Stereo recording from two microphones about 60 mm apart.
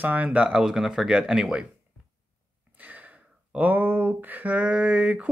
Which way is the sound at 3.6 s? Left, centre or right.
Right.